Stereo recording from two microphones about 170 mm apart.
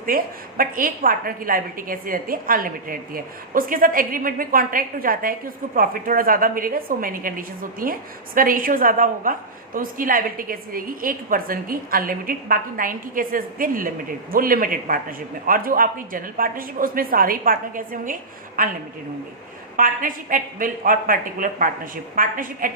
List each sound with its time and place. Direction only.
0.0 s a woman's voice: 55° right (ahead or behind)
19.7 s a woman's voice: 55° right (ahead or behind)